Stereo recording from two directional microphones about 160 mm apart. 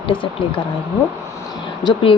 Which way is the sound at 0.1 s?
60° left (ahead or behind).